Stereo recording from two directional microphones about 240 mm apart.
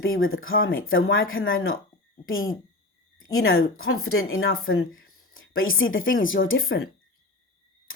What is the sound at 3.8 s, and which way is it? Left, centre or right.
A woman's voice, left.